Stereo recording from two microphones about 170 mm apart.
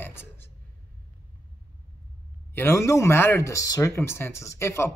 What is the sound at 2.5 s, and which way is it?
Speech, 15° left (ahead or behind).